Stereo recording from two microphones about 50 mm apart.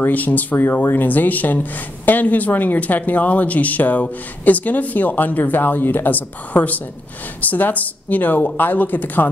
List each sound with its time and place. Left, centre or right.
0.0 s speech: left